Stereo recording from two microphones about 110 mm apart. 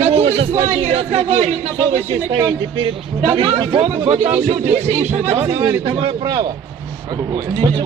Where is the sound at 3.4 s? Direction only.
55° right (ahead or behind); by 5.1 s 75° right (ahead or behind).